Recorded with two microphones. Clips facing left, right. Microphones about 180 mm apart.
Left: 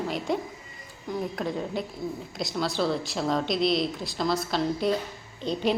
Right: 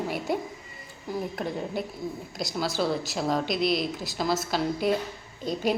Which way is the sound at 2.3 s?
5° right (ahead or behind).